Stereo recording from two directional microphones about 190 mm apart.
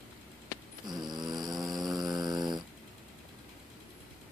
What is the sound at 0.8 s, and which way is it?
Snoring, 20° right (ahead or behind).